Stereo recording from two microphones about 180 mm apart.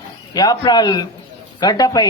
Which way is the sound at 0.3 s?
20° left (ahead or behind).